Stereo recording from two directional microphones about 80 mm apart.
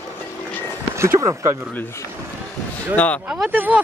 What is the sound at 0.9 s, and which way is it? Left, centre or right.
Speech, right.